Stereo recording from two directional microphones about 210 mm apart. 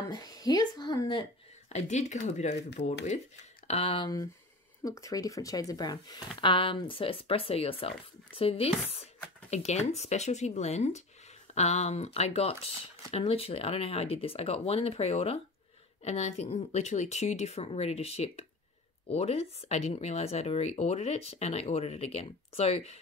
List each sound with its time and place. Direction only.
0.1 s a woman's voice: 20° left (ahead or behind)
1.7 s speech: 35° left (ahead or behind)